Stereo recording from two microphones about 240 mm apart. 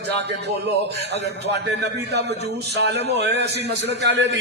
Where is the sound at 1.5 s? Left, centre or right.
Right.